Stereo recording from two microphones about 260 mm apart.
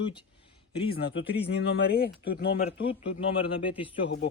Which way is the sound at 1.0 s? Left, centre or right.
Left.